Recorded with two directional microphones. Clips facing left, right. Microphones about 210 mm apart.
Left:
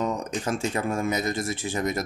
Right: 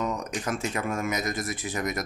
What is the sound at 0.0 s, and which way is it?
Speech, 30° left (ahead or behind).